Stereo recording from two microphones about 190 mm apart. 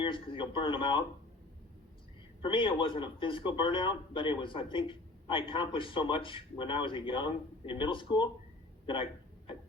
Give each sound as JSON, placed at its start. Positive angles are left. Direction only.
{"t": 0.0, "sound": "a man's voice", "side_deg": 25}
{"t": 2.4, "sound": "a man's voice", "side_deg": 25}